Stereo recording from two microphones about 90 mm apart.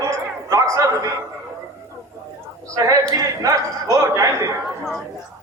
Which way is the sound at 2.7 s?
40° right (ahead or behind).